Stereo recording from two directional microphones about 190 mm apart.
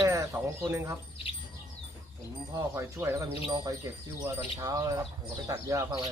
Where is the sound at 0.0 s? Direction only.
15° right (ahead or behind).